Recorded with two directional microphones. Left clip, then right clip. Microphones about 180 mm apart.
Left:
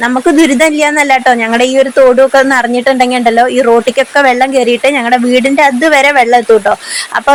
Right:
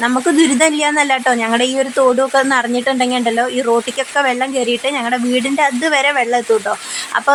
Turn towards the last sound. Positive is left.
turn(degrees=25)  # may be behind; listen again after turning